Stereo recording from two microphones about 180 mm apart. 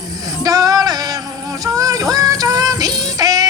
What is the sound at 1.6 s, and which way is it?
Synthetic singing, 20° right (ahead or behind).